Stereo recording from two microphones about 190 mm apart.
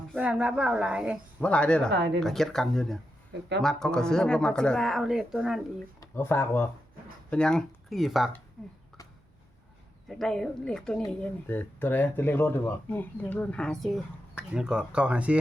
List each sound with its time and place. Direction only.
0.2 s speech: 5° right (ahead or behind)
1.4 s speech: 5° left (ahead or behind)
1.9 s speech: 65° right (ahead or behind)
2.2 s speech: centre (ahead or behind)
6.0 s speech: 15° left (ahead or behind)
10.1 s speech: centre (ahead or behind)